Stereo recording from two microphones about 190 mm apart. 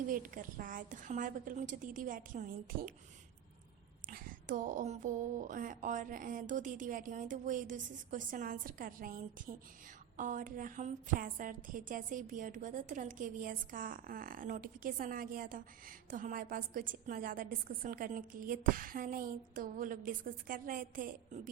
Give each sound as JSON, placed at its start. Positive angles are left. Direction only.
{"t": 0.1, "sound": "a woman's voice", "side_deg": -45}
{"t": 4.0, "sound": "a woman's voice", "side_deg": -50}